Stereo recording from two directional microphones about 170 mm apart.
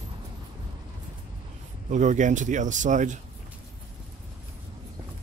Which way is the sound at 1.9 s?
45° right (ahead or behind).